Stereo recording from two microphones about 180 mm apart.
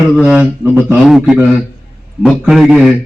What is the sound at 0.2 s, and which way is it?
A man's voice, 5° right (ahead or behind).